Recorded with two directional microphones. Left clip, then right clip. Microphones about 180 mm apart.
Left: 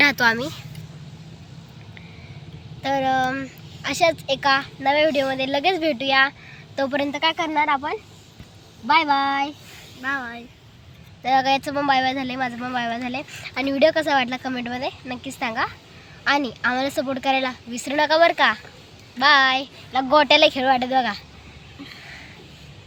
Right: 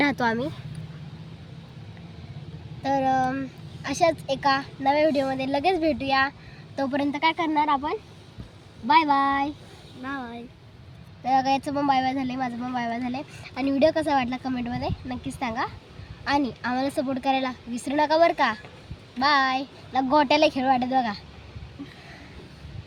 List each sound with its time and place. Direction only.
0.0 s speech: 20° right (ahead or behind)
2.8 s a woman's voice: centre (ahead or behind)
11.2 s a woman's voice: 5° left (ahead or behind)